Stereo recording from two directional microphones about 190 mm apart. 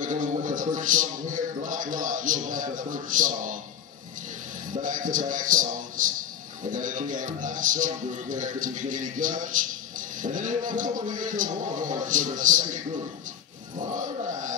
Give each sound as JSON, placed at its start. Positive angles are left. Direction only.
{"t": 0.0, "sound": "a man's voice", "side_deg": -40}
{"t": 4.8, "sound": "a man's voice", "side_deg": -45}